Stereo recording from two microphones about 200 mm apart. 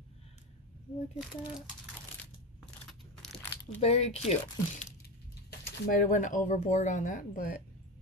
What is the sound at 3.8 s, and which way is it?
Speech, 30° left (ahead or behind).